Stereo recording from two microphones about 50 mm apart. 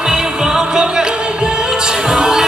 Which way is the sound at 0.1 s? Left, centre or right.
Centre.